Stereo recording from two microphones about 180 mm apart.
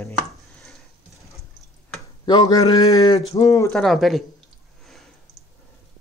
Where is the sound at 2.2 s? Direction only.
25° left (ahead or behind).